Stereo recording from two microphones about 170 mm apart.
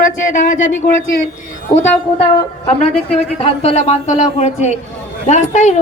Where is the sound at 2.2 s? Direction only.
35° left (ahead or behind).